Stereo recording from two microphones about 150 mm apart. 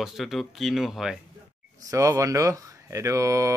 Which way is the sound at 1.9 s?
20° right (ahead or behind).